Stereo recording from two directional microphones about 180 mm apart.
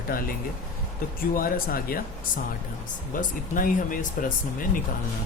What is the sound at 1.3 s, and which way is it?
Speech, 55° left (ahead or behind).